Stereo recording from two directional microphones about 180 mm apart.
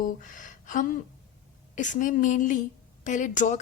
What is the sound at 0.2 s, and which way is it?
A woman's voice, 45° left (ahead or behind).